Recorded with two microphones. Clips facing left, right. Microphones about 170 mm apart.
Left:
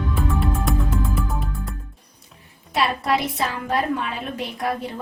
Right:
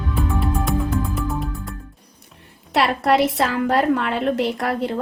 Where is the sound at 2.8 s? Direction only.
70° right (ahead or behind).